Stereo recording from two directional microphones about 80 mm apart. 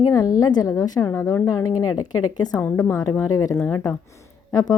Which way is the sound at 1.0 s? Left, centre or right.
Left.